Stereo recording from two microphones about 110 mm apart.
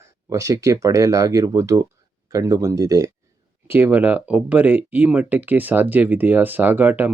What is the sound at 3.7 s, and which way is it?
Speech, 20° right (ahead or behind).